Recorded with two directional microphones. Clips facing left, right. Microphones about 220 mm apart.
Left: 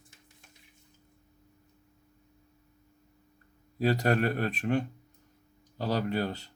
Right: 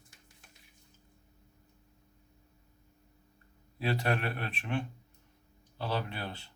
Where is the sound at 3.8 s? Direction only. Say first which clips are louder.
Left 6 dB; 40° left (ahead or behind).